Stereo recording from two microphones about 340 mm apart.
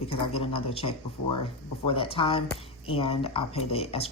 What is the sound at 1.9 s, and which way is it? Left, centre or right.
Speech, centre.